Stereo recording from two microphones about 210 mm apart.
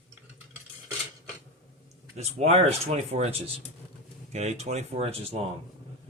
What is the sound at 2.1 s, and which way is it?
Speech, 30° right (ahead or behind).